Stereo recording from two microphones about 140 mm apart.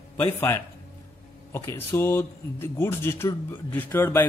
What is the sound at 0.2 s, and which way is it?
A man's voice, 20° left (ahead or behind).